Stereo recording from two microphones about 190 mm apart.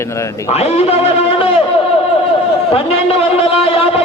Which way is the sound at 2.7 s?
30° left (ahead or behind).